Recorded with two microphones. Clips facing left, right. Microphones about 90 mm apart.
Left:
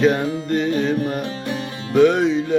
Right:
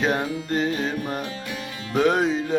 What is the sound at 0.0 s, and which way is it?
Music, 25° right (ahead or behind).